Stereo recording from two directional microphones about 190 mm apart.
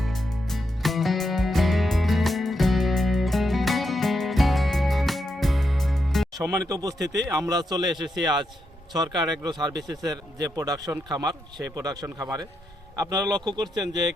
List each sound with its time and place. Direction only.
0.0 s music: centre (ahead or behind)
6.3 s speech: 15° right (ahead or behind)
7.0 s a man's voice: 65° right (ahead or behind)
7.3 s speech: 20° right (ahead or behind)